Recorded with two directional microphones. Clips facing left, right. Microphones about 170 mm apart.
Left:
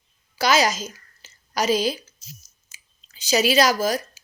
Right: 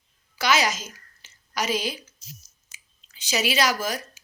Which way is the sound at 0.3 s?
35° left (ahead or behind).